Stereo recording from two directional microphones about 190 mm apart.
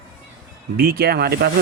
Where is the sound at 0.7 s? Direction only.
55° right (ahead or behind).